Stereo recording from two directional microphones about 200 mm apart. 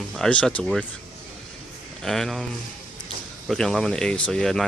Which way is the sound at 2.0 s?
Centre (ahead or behind).